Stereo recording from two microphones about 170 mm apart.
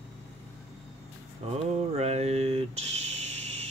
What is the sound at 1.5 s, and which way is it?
Mantra, 40° right (ahead or behind).